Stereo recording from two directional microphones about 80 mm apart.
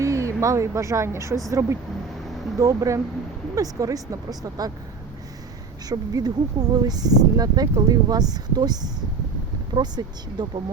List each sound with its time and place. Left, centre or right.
0.0 s speech: right
5.9 s speech: right